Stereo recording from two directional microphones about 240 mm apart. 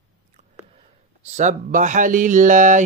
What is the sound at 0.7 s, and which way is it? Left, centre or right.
Speech, right.